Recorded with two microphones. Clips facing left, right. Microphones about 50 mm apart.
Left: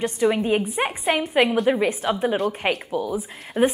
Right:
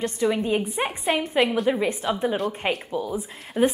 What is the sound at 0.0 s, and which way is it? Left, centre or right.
A woman's voice, centre.